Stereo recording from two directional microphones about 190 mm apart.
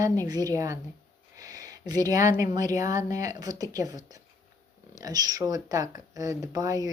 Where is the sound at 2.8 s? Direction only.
20° right (ahead or behind).